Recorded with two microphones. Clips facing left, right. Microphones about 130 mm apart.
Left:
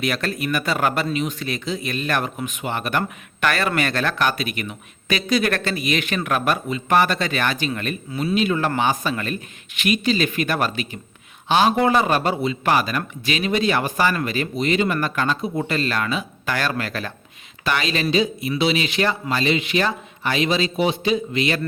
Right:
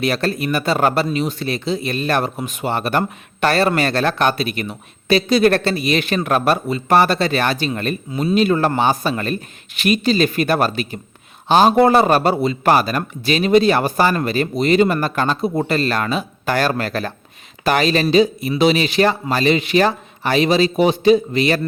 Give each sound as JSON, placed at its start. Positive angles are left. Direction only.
{"t": 0.0, "sound": "speech", "side_deg": -30}